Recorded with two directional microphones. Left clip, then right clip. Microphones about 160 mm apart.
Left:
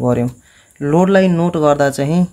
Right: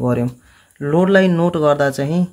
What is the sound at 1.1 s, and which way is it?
Speech, 15° left (ahead or behind).